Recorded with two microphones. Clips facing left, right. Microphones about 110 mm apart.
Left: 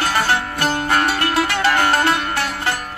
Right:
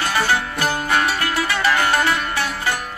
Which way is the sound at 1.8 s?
35° left (ahead or behind).